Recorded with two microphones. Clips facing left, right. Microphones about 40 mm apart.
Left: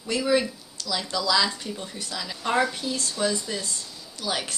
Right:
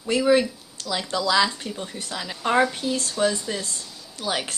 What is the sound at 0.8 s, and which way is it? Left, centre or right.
Speech, right.